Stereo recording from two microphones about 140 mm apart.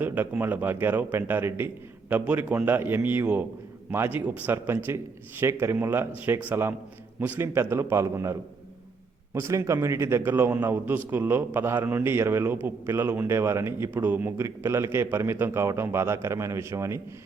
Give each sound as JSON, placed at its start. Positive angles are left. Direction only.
{"t": 0.0, "sound": "a man's voice", "side_deg": -10}